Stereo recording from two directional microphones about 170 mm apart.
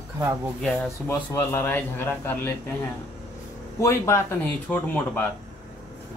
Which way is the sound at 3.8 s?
15° left (ahead or behind).